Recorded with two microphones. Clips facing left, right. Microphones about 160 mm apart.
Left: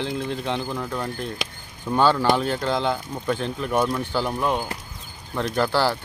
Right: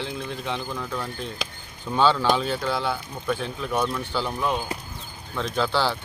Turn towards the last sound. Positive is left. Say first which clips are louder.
# left 2 dB
turn(degrees=10)  # may be behind; listen again after turning